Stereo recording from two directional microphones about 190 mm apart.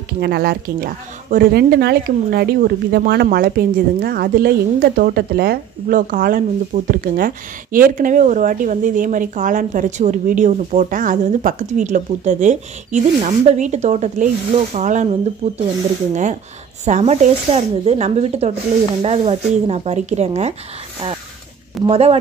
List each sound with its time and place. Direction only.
0.2 s a woman's voice: 55° right (ahead or behind); by 15.6 s 35° right (ahead or behind)
16.8 s a woman's voice: 35° right (ahead or behind)
21.8 s a woman's voice: 30° right (ahead or behind)